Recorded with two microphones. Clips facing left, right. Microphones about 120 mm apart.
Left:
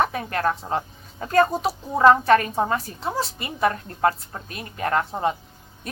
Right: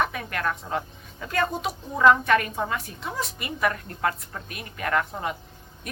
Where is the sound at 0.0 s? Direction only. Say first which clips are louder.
Left 4 dB; 35° left (ahead or behind).